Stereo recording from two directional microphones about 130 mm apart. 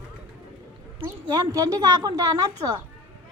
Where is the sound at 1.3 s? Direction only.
30° right (ahead or behind).